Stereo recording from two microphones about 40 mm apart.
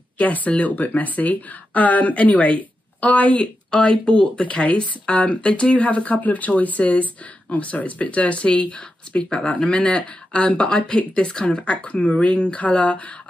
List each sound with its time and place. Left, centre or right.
0.2 s speech: left
3.7 s speech: left
10.6 s speech: left